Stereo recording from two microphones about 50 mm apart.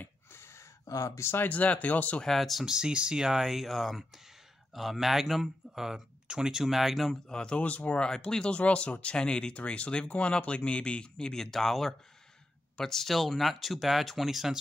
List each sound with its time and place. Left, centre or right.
0.3 s a sound: left
1.3 s speech: left
2.2 s speech: centre
2.6 s speech: centre
7.2 s speech: centre